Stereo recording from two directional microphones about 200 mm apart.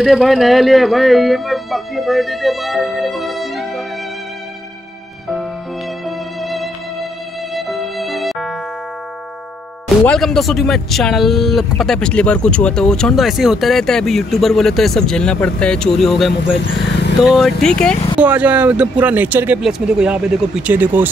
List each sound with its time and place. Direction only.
0.0 s speech: centre (ahead or behind)
6.0 s music: centre (ahead or behind)
10.0 s speech: centre (ahead or behind)
18.2 s speech: 5° right (ahead or behind)